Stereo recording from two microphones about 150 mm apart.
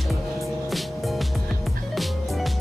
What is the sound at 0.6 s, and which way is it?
Music, centre (ahead or behind).